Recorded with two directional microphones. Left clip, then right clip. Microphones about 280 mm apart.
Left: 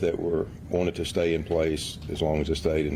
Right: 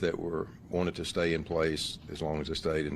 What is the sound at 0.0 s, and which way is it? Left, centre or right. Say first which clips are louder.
Speech: left 6 dB; right.